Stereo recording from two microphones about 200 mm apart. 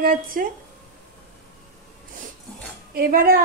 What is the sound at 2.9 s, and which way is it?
Speech, 50° right (ahead or behind).